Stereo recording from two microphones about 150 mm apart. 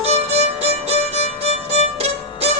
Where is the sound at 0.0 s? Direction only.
45° right (ahead or behind).